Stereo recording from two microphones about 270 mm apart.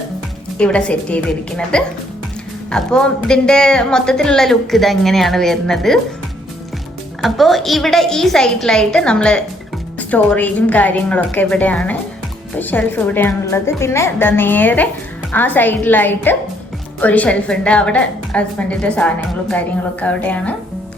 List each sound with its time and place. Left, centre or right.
0.6 s a woman's voice: centre
7.2 s a woman's voice: centre